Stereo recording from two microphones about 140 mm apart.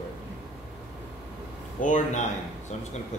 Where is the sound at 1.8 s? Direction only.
60° left (ahead or behind).